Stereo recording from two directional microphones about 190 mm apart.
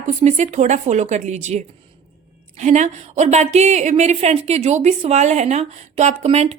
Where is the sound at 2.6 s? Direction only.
40° right (ahead or behind).